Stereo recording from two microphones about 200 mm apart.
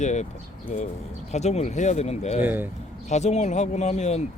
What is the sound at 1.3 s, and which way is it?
A man's voice, 35° left (ahead or behind).